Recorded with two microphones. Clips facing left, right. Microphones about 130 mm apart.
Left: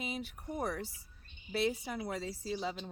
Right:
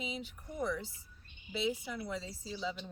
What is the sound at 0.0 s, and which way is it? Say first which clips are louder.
Speech: left 2 dB; 60° left (ahead or behind).